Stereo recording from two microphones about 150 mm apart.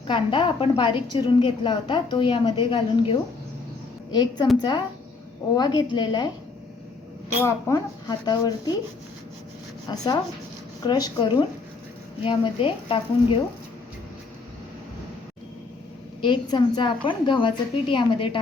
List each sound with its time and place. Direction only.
0.1 s a woman's voice: 30° left (ahead or behind)
5.5 s speech: 30° left (ahead or behind)
7.4 s speech: 25° left (ahead or behind)
9.9 s a woman's voice: 25° left (ahead or behind)
16.2 s a woman's voice: 30° left (ahead or behind)